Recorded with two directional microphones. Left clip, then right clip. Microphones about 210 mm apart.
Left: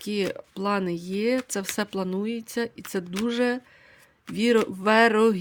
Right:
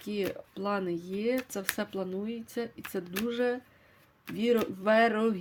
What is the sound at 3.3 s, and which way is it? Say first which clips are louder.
Speech: left 5 dB; 35° left (ahead or behind).